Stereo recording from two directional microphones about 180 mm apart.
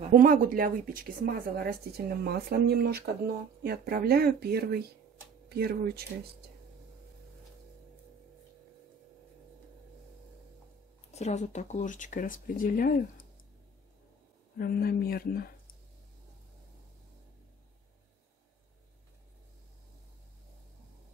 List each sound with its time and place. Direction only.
0.0 s speech: 45° right (ahead or behind)
11.1 s speech: 40° left (ahead or behind)
14.6 s speech: 60° left (ahead or behind)